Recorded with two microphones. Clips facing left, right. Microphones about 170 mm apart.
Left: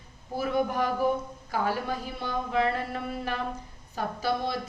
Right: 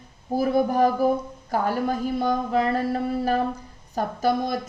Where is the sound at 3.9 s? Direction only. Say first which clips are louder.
Right 6 dB; 45° right (ahead or behind).